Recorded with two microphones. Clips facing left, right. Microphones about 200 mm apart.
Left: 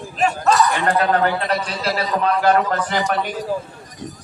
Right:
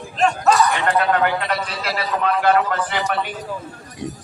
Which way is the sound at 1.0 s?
40° left (ahead or behind).